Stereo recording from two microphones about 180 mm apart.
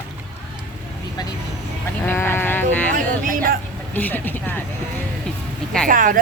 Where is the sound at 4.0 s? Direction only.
10° left (ahead or behind).